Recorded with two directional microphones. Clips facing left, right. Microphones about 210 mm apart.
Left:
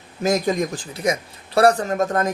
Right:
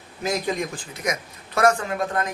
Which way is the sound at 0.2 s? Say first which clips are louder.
Left 5 dB; 45° left (ahead or behind).